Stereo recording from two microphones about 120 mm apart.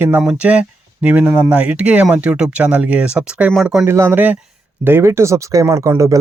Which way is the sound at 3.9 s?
20° right (ahead or behind).